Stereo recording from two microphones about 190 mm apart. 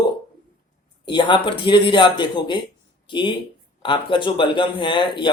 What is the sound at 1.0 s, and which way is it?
Speech, 25° left (ahead or behind).